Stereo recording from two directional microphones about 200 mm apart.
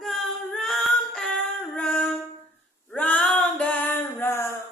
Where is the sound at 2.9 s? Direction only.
5° left (ahead or behind).